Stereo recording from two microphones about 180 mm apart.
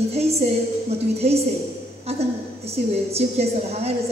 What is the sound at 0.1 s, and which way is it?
A woman's voice, 35° right (ahead or behind).